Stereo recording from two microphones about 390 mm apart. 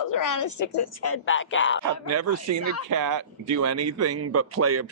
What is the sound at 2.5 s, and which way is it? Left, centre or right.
Speech, right.